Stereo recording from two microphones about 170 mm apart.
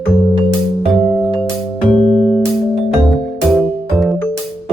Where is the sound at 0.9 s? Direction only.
Centre (ahead or behind).